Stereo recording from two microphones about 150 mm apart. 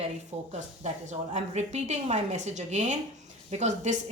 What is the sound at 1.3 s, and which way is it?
A woman's voice, 50° right (ahead or behind).